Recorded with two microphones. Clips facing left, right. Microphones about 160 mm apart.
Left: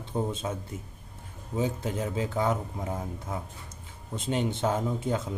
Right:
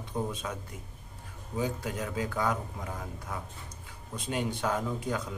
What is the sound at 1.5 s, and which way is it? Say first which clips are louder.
Speech: left 3 dB; 25° left (ahead or behind).